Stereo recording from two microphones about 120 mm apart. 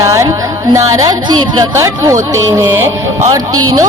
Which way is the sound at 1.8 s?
25° right (ahead or behind).